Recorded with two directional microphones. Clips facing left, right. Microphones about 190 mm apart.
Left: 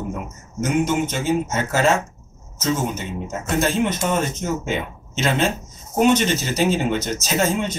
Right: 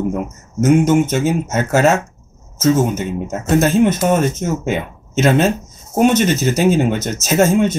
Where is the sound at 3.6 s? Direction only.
45° right (ahead or behind).